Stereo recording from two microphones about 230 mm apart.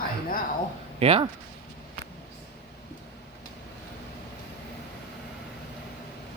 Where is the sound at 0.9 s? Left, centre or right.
Right.